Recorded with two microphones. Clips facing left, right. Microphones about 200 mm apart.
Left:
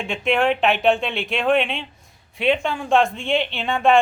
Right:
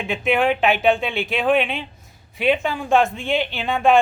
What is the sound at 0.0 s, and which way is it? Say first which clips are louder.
Speech: right 1 dB; centre (ahead or behind).